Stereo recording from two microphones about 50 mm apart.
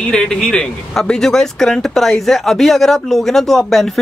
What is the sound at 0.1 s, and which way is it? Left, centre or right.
Speech, centre.